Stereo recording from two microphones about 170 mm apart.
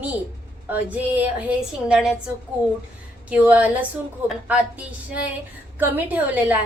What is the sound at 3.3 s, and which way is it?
A woman's voice, 10° right (ahead or behind).